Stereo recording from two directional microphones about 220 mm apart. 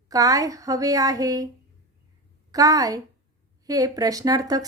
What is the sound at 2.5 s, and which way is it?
A woman's voice, 15° right (ahead or behind).